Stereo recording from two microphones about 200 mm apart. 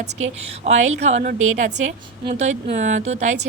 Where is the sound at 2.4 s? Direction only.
35° right (ahead or behind).